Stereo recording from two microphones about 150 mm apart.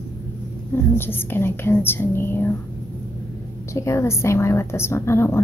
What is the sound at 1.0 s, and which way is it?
A woman's voice, 15° left (ahead or behind).